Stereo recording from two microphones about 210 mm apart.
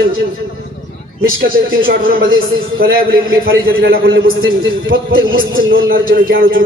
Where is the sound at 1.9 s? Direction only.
45° right (ahead or behind).